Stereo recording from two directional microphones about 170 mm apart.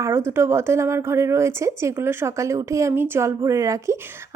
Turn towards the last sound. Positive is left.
turn(degrees=-20)  # may be behind; listen again after turning